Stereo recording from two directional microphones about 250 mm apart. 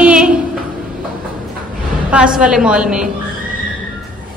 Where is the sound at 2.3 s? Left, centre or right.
Centre.